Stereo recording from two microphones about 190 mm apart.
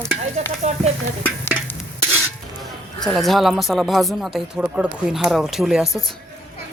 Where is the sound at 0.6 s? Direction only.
35° right (ahead or behind).